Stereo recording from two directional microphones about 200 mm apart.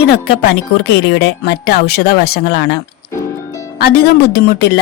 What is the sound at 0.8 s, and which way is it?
A woman's voice, 55° left (ahead or behind).